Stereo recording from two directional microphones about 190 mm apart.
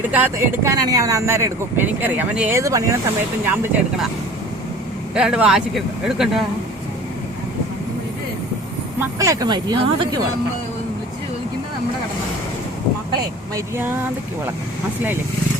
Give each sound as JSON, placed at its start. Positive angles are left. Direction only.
{"t": 0.1, "sound": "speech", "side_deg": -10}
{"t": 5.1, "sound": "speech", "side_deg": -5}
{"t": 9.0, "sound": "speech", "side_deg": -15}
{"t": 13.7, "sound": "speech", "side_deg": -10}